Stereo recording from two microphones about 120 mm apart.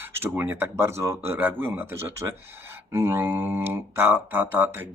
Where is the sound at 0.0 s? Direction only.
20° right (ahead or behind).